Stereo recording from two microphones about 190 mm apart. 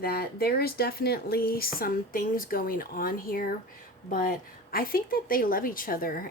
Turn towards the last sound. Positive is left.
turn(degrees=50)  # may be behind; listen again after turning